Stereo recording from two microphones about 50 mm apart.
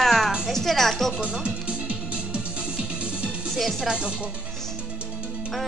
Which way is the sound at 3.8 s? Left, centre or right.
Right.